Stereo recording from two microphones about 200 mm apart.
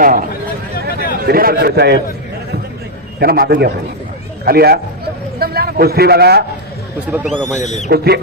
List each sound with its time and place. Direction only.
0.0 s a man's voice: 45° right (ahead or behind)
0.9 s a sound: 45° left (ahead or behind)
1.2 s a man's voice: 50° right (ahead or behind)
3.2 s a man's voice: 50° right (ahead or behind)
7.1 s speech: 10° right (ahead or behind)
7.6 s owl: 35° left (ahead or behind)
7.9 s a man's voice: 55° right (ahead or behind)